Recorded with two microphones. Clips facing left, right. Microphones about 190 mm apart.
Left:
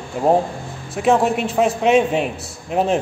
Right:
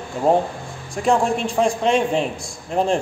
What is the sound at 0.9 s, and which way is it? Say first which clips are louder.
A man's voice: left 2 dB; 5° left (ahead or behind).